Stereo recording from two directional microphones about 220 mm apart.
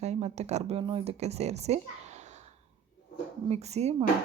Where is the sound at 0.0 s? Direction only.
30° right (ahead or behind).